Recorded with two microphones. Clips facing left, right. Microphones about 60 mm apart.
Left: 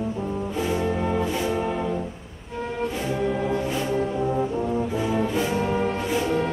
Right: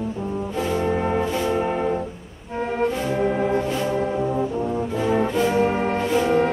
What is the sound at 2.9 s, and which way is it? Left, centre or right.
Music, right.